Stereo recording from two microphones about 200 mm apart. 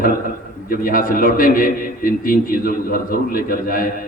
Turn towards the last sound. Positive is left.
turn(degrees=45)  # may be behind; listen again after turning